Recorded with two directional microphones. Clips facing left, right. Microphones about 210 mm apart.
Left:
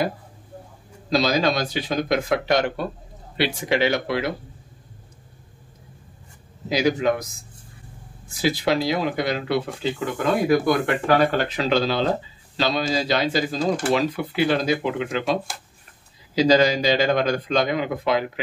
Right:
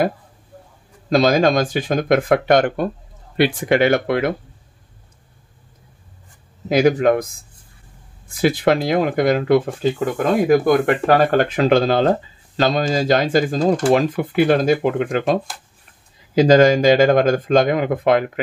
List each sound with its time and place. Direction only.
1.1 s speech: 50° right (ahead or behind)
6.7 s speech: 55° right (ahead or behind)
11.1 s speech: 50° right (ahead or behind)
16.3 s speech: 50° right (ahead or behind)